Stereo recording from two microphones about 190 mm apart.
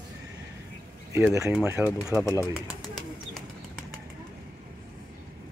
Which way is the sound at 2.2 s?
15° left (ahead or behind).